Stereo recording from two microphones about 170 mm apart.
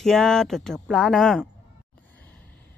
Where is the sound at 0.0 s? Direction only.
Centre (ahead or behind).